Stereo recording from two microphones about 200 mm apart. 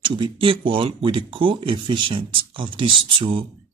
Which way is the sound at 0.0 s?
25° right (ahead or behind).